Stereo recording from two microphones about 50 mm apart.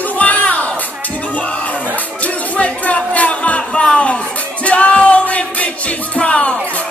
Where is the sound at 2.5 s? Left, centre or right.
Left.